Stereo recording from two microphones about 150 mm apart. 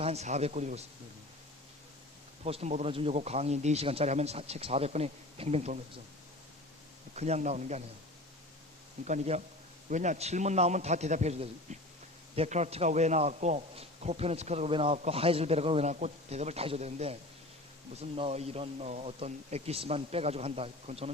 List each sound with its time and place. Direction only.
0.0 s a man's voice: 45° right (ahead or behind)
2.4 s a man's voice: 45° right (ahead or behind)
7.2 s a man's voice: 50° right (ahead or behind)
9.0 s a man's voice: 50° right (ahead or behind)